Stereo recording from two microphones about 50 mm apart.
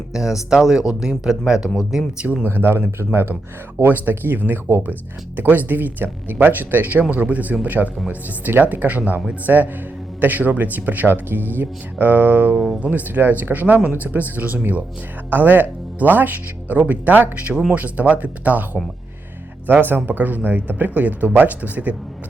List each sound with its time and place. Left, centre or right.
0.1 s speech: centre
2.5 s speech: right
3.8 s speech: right
12.5 s speech: centre
12.8 s speech: right